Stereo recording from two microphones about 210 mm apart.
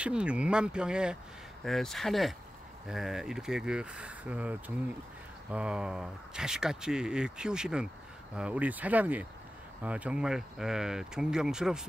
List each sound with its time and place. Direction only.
0.0 s speech: 5° right (ahead or behind)